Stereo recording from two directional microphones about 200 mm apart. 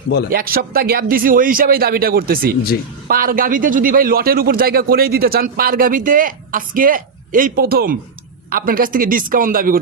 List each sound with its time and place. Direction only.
0.3 s speech: 50° right (ahead or behind)